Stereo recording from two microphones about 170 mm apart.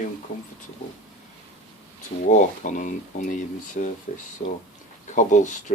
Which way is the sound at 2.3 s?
45° left (ahead or behind).